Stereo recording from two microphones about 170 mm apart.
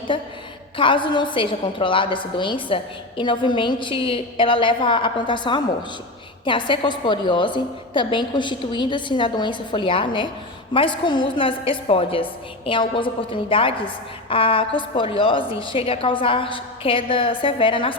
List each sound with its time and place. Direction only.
0.1 s a woman's voice: 30° left (ahead or behind)